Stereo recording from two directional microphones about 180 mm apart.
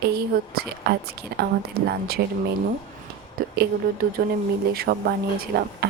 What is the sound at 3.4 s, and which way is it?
A woman's voice, 55° right (ahead or behind).